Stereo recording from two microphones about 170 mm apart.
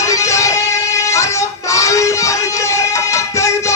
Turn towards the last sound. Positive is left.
turn(degrees=15)  # may be behind; listen again after turning